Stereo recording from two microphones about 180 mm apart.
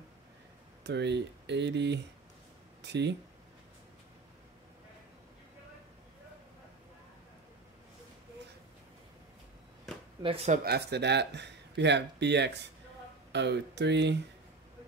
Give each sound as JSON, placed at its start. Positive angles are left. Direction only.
{"t": 0.8, "sound": "speech", "side_deg": -70}
{"t": 9.9, "sound": "chop", "side_deg": 0}
{"t": 10.2, "sound": "speech", "side_deg": -35}
{"t": 10.6, "sound": "speech", "side_deg": -65}